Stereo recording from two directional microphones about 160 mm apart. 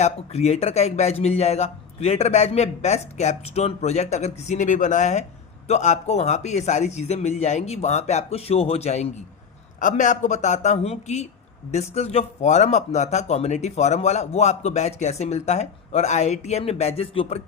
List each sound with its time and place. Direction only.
0.0 s speech: 45° left (ahead or behind)